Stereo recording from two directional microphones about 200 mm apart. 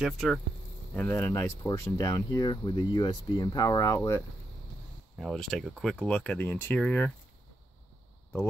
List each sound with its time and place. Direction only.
0.0 s speech: centre (ahead or behind)
5.2 s speech: centre (ahead or behind)